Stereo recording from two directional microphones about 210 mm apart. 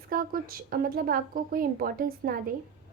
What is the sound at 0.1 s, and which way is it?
A woman's voice, 45° right (ahead or behind).